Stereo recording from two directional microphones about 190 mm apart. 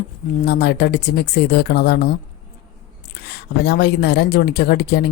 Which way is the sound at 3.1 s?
60° left (ahead or behind).